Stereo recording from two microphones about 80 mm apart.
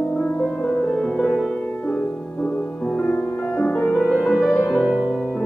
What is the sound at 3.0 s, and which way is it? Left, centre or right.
Music, centre.